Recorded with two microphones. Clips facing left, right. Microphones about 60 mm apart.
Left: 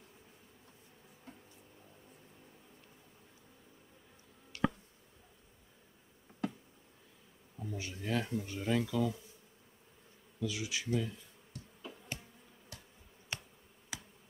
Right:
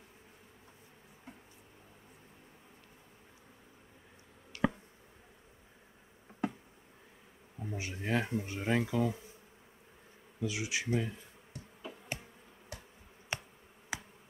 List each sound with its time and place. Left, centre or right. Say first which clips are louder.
7.5 s speech: right 2 dB; right
10.4 s speech: right 2 dB; right
11.0 s speech: right 1 dB; right
11.5 s insect: right 2 dB; right
13.3 s bee: right 4 dB; right